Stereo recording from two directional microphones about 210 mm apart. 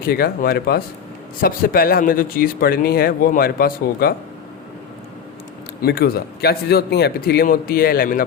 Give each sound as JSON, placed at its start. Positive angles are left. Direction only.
{"t": 0.1, "sound": "speech", "side_deg": 45}
{"t": 5.8, "sound": "speech", "side_deg": 50}